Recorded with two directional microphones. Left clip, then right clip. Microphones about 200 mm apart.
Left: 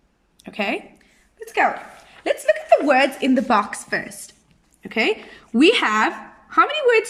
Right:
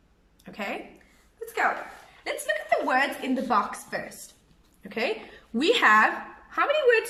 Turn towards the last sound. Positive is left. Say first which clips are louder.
# left 5 dB
turn(degrees=55)  # may be behind; listen again after turning